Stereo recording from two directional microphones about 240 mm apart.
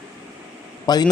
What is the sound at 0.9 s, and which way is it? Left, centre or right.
Speech, centre.